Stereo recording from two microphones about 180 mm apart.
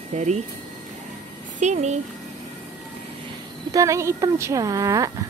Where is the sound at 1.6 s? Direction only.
40° right (ahead or behind).